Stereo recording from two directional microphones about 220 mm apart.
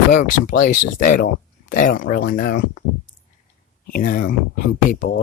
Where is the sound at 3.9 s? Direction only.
40° left (ahead or behind).